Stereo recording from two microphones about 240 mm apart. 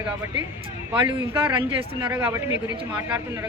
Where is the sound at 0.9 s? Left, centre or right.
Centre.